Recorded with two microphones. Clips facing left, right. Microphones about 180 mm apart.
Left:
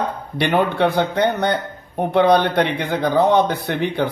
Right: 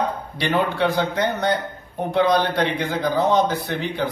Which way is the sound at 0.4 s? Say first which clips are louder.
Left 4 dB; 60° left (ahead or behind).